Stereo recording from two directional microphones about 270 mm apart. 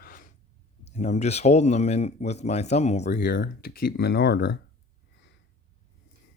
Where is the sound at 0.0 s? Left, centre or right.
Left.